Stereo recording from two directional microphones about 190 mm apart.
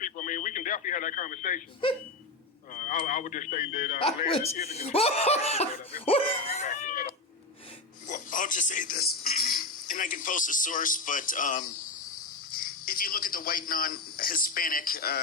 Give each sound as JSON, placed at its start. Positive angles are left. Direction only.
{"t": 0.0, "sound": "radio", "side_deg": 45}
{"t": 2.7, "sound": "a man's voice", "side_deg": 45}
{"t": 3.9, "sound": "a man's voice", "side_deg": 30}